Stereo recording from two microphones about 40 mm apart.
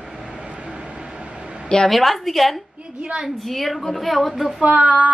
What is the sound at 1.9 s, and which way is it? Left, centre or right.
Speech, centre.